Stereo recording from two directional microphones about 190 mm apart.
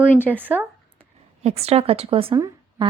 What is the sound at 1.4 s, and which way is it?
Speech, 35° right (ahead or behind).